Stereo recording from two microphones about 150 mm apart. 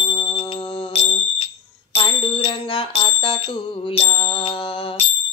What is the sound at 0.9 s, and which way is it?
Fire alarm, 40° left (ahead or behind).